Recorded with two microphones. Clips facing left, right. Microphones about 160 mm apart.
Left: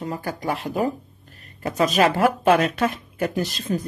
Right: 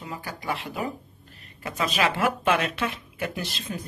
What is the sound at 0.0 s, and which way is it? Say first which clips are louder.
Speech: left 7 dB; 45° left (ahead or behind).